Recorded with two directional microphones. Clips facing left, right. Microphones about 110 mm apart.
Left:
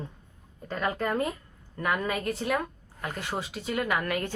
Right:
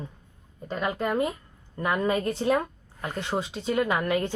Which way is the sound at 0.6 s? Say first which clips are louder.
Right 1 dB; 15° right (ahead or behind).